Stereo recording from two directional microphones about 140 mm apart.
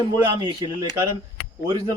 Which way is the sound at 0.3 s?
30° right (ahead or behind).